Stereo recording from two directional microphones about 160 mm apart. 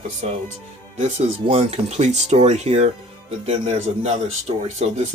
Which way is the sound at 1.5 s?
45° right (ahead or behind).